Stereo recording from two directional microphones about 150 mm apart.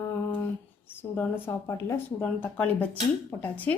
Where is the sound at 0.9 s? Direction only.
15° left (ahead or behind).